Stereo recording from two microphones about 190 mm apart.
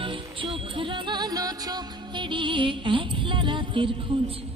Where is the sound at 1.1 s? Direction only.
20° right (ahead or behind).